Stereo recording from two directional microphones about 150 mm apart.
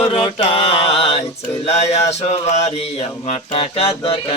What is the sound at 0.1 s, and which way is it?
Mantra, 40° left (ahead or behind).